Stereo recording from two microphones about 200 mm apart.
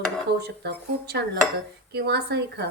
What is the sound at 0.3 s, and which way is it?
A woman's voice, 55° right (ahead or behind).